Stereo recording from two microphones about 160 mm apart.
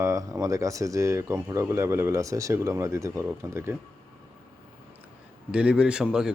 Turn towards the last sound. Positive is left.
turn(degrees=-5)  # may be behind; listen again after turning